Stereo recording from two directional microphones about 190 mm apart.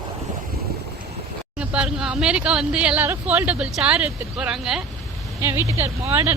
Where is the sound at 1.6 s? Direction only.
5° right (ahead or behind).